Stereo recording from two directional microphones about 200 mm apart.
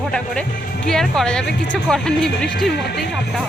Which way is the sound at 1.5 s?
60° left (ahead or behind).